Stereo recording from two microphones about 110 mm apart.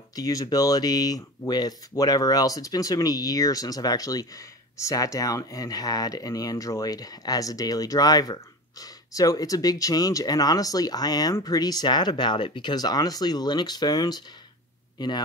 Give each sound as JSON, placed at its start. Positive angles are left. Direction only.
{"t": 0.1, "sound": "speech", "side_deg": 35}